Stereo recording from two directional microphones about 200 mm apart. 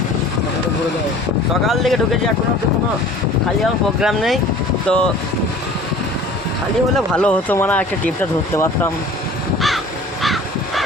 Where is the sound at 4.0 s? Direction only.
Centre (ahead or behind).